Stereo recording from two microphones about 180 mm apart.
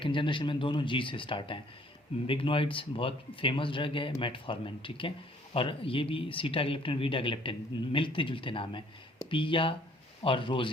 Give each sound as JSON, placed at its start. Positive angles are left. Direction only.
{"t": 0.0, "sound": "speech", "side_deg": 25}